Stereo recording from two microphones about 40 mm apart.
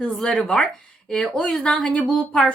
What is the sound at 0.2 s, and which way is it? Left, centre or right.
A woman's voice, centre.